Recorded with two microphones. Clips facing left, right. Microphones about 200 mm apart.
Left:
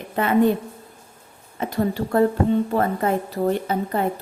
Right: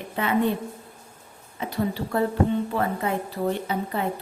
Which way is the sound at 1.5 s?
45° left (ahead or behind).